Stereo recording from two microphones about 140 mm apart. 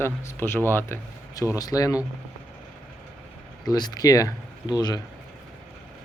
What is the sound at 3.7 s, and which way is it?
Speech, 30° left (ahead or behind).